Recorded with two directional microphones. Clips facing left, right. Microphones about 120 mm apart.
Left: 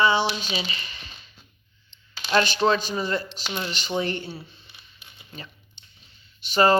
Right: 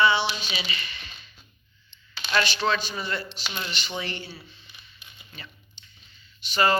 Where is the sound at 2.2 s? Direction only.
35° left (ahead or behind).